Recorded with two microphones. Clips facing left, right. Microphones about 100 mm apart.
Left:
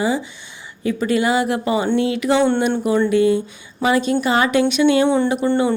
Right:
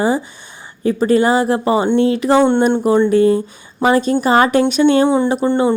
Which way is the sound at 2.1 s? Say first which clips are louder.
Right 4 dB; 35° right (ahead or behind).